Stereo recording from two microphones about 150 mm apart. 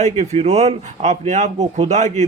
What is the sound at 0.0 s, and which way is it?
Speech, 50° right (ahead or behind).